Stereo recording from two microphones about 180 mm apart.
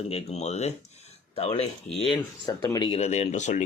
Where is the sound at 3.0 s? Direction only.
35° left (ahead or behind).